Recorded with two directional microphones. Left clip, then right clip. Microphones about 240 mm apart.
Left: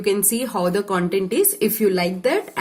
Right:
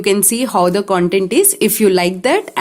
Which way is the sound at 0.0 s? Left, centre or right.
Right.